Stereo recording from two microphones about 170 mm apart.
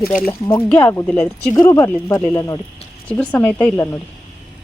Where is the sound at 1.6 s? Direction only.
20° left (ahead or behind).